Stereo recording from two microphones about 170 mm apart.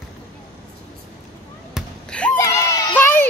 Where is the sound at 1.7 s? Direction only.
5° left (ahead or behind).